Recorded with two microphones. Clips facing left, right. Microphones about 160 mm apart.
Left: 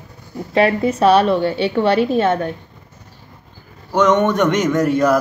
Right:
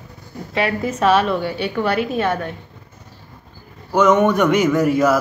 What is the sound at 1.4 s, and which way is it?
A woman's voice, 25° left (ahead or behind).